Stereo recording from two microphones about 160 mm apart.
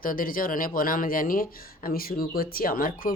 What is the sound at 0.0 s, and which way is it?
Speech, 60° left (ahead or behind).